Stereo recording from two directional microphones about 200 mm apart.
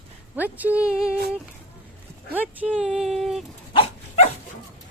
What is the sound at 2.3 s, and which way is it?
Speech, 10° right (ahead or behind).